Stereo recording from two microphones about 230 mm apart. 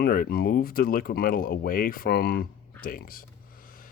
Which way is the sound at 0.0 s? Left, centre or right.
Left.